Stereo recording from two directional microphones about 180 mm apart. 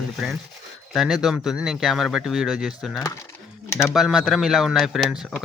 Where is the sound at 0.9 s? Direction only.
Centre (ahead or behind).